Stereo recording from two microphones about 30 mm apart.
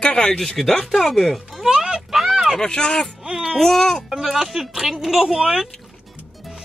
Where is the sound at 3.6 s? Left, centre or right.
Centre.